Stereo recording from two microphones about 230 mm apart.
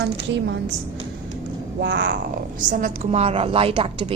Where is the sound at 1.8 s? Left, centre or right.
Right.